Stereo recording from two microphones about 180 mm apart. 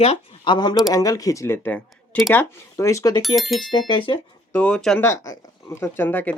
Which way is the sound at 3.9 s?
30° left (ahead or behind).